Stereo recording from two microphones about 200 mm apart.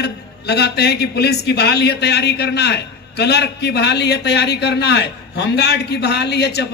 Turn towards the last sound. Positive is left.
turn(degrees=55)  # may be behind; listen again after turning